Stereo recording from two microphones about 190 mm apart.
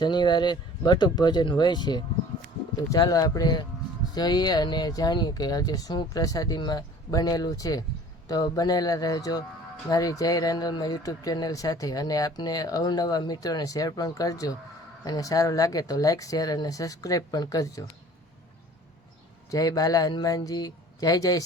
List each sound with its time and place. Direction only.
0.0 s speech: 25° left (ahead or behind)
19.5 s speech: 20° left (ahead or behind)